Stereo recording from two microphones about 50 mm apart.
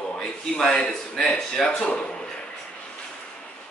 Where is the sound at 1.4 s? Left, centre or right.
Centre.